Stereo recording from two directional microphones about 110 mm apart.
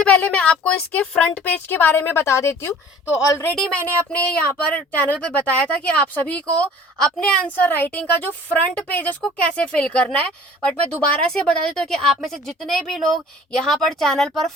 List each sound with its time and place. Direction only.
0.0 s a woman's voice: 10° left (ahead or behind)
3.5 s speech: 5° left (ahead or behind)
3.8 s a woman's voice: 15° left (ahead or behind)